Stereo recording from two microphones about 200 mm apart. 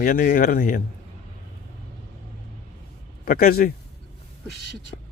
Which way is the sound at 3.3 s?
45° left (ahead or behind).